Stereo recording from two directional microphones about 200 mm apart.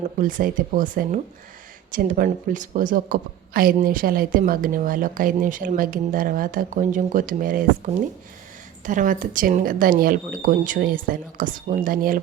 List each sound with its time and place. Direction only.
0.2 s a man's voice: 40° right (ahead or behind)
8.8 s a man's voice: 40° right (ahead or behind)